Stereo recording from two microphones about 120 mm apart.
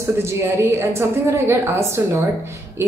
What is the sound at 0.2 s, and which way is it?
Speech, 20° right (ahead or behind).